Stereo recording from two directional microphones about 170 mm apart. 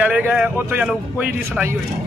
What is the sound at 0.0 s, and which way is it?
A man's voice, 10° right (ahead or behind).